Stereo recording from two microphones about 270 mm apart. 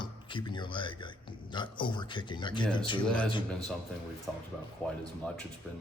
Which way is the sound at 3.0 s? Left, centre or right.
Centre.